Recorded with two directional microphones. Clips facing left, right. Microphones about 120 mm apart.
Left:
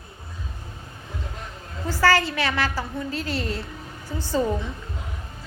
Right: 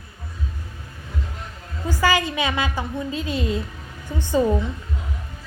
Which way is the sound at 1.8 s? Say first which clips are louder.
Even; 15° right (ahead or behind).